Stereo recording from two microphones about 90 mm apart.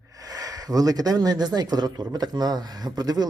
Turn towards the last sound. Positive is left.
turn(degrees=-50)  # may be behind; listen again after turning